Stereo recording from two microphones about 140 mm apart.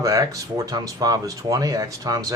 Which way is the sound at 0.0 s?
25° right (ahead or behind).